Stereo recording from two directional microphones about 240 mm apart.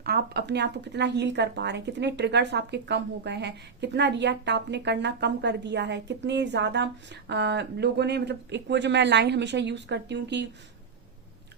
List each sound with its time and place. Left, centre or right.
0.0 s speech: right